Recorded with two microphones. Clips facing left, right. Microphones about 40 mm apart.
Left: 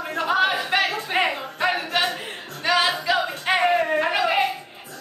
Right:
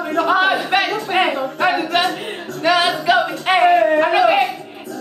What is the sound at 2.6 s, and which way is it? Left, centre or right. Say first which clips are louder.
Music: right 5 dB; right.